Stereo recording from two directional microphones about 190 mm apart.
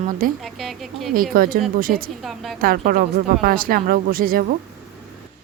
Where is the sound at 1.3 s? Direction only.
50° right (ahead or behind).